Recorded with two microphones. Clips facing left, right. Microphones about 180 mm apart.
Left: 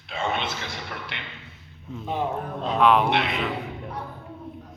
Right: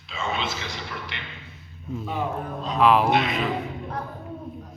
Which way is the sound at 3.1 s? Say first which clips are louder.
Right 2 dB; 60° left (ahead or behind).